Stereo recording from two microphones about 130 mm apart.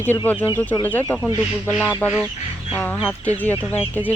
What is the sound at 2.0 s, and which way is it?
Speech, 5° left (ahead or behind).